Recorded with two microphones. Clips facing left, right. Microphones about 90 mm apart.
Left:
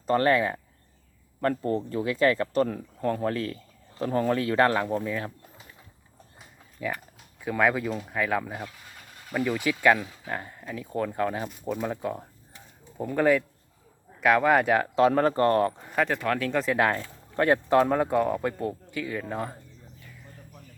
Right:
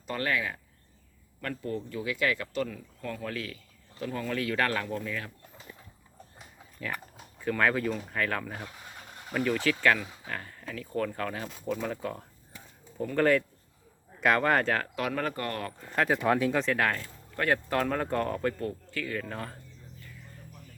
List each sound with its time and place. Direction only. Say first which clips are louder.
0.1 s speech: left 9 dB; 35° left (ahead or behind)
7.4 s speech: left 2 dB; 10° left (ahead or behind)
14.9 s speech: left 10 dB; 30° left (ahead or behind)
16.0 s speech: right 2 dB; 15° right (ahead or behind)
16.5 s speech: left 2 dB; centre (ahead or behind)
16.7 s speech: left 4 dB; 20° left (ahead or behind)